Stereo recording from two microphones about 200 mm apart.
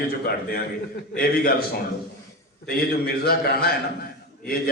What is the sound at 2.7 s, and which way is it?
A man's voice, 50° left (ahead or behind).